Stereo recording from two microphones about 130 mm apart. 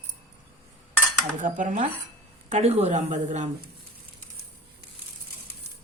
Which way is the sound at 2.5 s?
55° right (ahead or behind).